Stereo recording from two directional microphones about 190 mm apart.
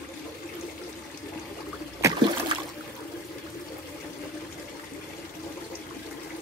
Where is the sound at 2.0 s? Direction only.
20° right (ahead or behind).